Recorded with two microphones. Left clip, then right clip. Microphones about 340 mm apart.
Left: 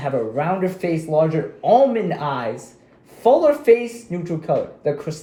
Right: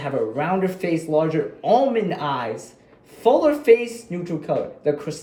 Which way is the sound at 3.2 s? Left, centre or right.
Centre.